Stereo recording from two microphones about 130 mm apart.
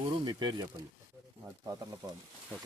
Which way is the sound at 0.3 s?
35° right (ahead or behind).